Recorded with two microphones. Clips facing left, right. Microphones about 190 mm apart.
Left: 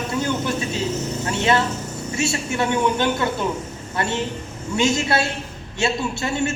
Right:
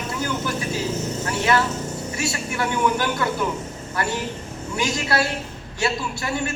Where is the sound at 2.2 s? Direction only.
25° left (ahead or behind).